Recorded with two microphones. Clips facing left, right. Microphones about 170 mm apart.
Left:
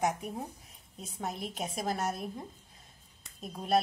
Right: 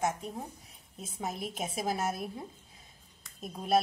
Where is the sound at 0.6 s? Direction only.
Centre (ahead or behind).